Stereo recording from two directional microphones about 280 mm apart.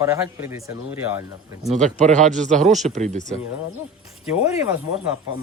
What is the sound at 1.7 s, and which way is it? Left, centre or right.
Speech, right.